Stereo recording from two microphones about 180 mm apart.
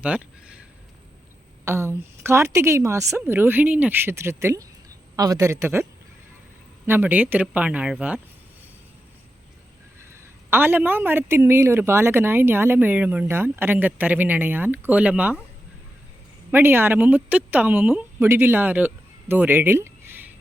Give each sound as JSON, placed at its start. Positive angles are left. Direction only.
{"t": 0.0, "sound": "a sound", "side_deg": -5}
{"t": 1.6, "sound": "speech", "side_deg": -15}
{"t": 6.8, "sound": "speech", "side_deg": -10}
{"t": 10.5, "sound": "speech", "side_deg": -10}
{"t": 16.5, "sound": "speech", "side_deg": -10}